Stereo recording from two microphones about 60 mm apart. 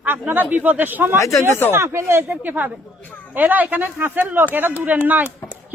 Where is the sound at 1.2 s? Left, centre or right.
Left.